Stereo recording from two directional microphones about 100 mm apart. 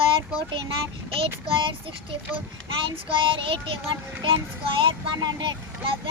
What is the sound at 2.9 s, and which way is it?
Speech, 60° right (ahead or behind).